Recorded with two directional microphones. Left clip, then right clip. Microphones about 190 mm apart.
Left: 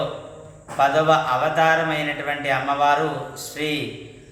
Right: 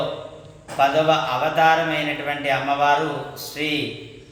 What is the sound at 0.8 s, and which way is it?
A man's voice, 10° right (ahead or behind).